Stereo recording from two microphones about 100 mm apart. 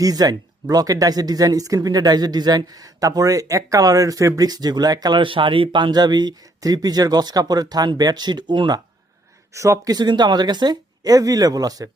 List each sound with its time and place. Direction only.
0.0 s speech: 40° right (ahead or behind)
5.2 s speech: 60° right (ahead or behind)
9.5 s speech: 30° right (ahead or behind)
9.9 s speech: 45° right (ahead or behind)